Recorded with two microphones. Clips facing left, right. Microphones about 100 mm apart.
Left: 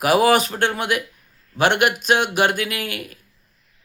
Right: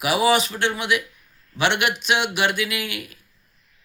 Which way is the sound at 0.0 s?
45° left (ahead or behind).